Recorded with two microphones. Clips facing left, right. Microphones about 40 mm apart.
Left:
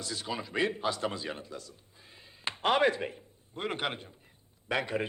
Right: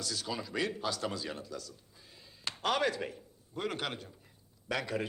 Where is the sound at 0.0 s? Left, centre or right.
Left.